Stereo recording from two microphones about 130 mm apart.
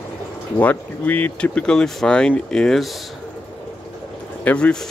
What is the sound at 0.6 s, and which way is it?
Speech, 10° left (ahead or behind).